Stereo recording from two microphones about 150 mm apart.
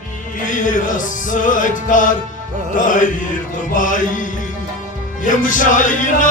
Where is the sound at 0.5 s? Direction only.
60° left (ahead or behind).